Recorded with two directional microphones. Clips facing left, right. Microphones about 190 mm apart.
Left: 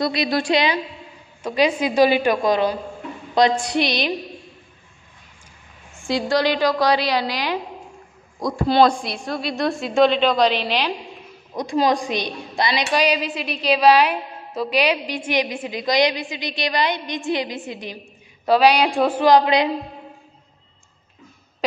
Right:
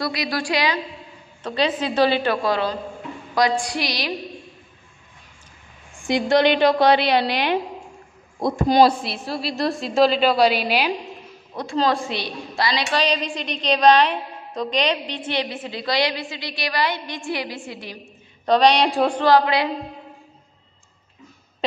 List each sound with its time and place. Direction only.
0.0 s a sound: 25° left (ahead or behind)
1.4 s a woman's voice: 10° left (ahead or behind)
3.3 s a sound: 20° left (ahead or behind)
6.0 s a woman's voice: 20° right (ahead or behind)
6.4 s a woman's voice: 60° right (ahead or behind)
8.6 s a woman's voice: 15° right (ahead or behind)
9.0 s a woman's voice: 5° right (ahead or behind)
11.5 s a woman's voice: 15° left (ahead or behind)
18.4 s a woman's voice: 5° left (ahead or behind)
19.2 s a sound: 20° left (ahead or behind)